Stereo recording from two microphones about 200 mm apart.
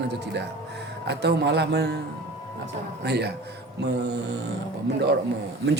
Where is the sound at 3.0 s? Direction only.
55° right (ahead or behind).